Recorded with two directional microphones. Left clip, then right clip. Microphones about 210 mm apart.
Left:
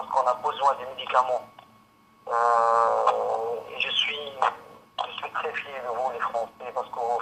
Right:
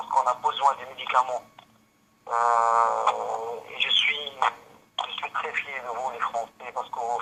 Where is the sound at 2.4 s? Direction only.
25° right (ahead or behind).